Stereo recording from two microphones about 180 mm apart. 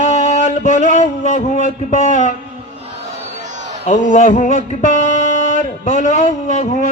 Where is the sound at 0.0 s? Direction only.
40° left (ahead or behind).